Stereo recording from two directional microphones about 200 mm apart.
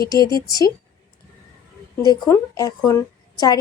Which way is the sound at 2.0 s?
20° left (ahead or behind).